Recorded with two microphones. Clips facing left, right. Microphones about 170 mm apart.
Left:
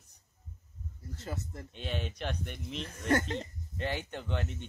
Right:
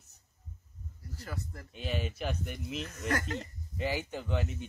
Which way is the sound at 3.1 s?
25° left (ahead or behind).